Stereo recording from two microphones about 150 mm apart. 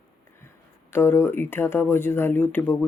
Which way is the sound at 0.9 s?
15° left (ahead or behind).